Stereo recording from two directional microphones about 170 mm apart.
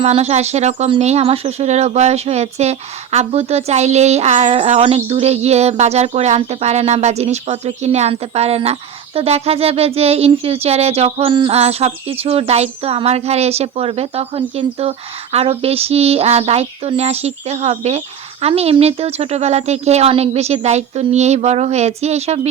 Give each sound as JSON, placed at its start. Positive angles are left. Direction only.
{"t": 0.0, "sound": "speech", "side_deg": -40}